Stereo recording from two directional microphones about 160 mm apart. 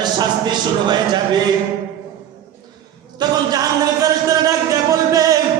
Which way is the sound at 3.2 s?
25° right (ahead or behind).